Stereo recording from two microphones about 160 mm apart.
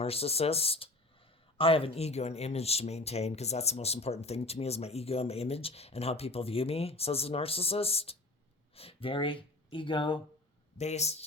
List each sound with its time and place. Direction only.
0.0 s speech: 40° left (ahead or behind)
10.8 s speech: 45° left (ahead or behind)